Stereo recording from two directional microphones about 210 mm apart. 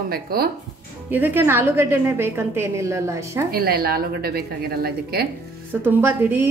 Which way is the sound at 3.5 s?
45° right (ahead or behind).